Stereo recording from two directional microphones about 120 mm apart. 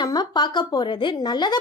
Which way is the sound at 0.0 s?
35° left (ahead or behind).